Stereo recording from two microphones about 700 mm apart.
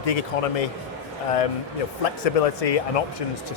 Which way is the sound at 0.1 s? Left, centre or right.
Left.